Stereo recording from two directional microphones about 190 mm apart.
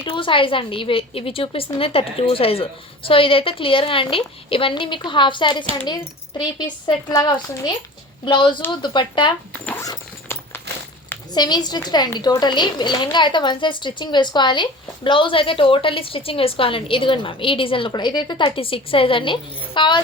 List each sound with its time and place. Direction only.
0.0 s a woman's voice: 30° left (ahead or behind)
9.5 s speech: 5° left (ahead or behind)
9.8 s a sound: 15° left (ahead or behind)
11.3 s a woman's voice: 20° left (ahead or behind)